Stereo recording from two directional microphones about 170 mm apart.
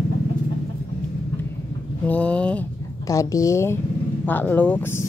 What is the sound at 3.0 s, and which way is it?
A woman's voice, 20° left (ahead or behind).